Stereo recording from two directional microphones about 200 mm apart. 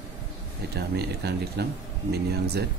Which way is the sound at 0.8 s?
55° right (ahead or behind).